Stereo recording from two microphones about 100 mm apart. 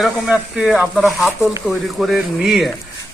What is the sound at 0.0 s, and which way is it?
Speech, 5° right (ahead or behind).